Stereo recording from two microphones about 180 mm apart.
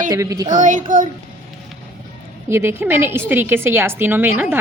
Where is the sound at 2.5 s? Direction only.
15° right (ahead or behind).